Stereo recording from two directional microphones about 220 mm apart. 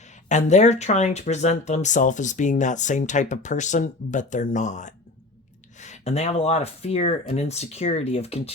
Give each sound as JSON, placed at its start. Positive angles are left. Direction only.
{"t": 0.3, "sound": "speech", "side_deg": 30}